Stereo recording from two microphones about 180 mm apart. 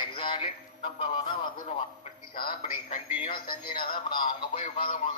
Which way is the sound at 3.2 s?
30° left (ahead or behind).